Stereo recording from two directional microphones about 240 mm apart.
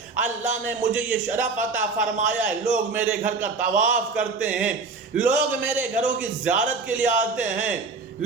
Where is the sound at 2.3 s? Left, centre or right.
Centre.